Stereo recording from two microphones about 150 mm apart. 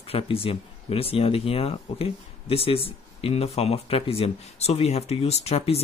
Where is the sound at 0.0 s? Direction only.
40° left (ahead or behind).